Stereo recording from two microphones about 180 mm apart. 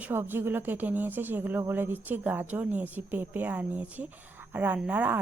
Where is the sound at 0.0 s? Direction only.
10° right (ahead or behind).